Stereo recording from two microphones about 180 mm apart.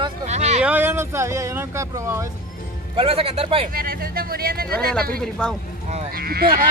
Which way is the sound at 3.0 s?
30° right (ahead or behind).